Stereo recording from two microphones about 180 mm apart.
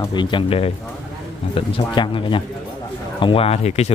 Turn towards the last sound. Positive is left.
turn(degrees=35)  # may be behind; listen again after turning